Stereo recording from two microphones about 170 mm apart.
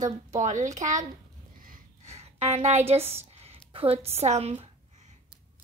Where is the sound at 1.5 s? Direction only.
55° right (ahead or behind).